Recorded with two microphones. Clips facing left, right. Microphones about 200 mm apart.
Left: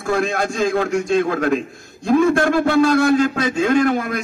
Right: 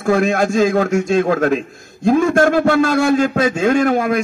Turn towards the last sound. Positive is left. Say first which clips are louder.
# right 2 dB
turn(degrees=-45)  # may be behind; listen again after turning